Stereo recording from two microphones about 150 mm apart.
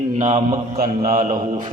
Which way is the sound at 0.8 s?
65° right (ahead or behind).